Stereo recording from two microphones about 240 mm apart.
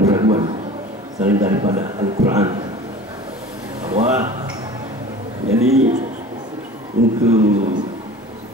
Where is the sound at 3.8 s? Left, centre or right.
Centre.